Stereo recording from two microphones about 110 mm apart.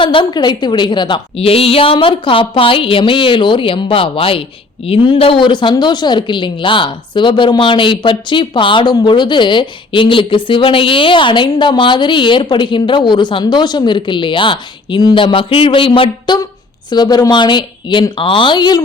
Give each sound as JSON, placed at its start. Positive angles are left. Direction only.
{"t": 0.0, "sound": "speech", "side_deg": 50}